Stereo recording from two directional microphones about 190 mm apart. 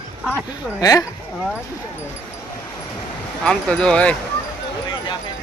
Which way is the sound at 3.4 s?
5° left (ahead or behind).